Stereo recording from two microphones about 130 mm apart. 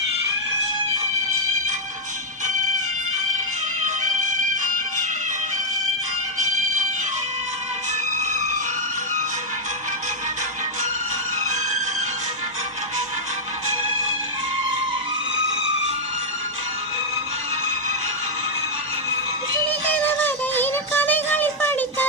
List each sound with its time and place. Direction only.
3.8 s music: 75° right (ahead or behind)
8.2 s a sound: 65° right (ahead or behind)
11.4 s music: 70° right (ahead or behind)
19.9 s music: 15° left (ahead or behind)